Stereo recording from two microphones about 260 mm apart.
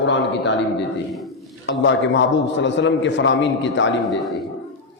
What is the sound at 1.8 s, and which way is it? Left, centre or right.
A man's voice, left.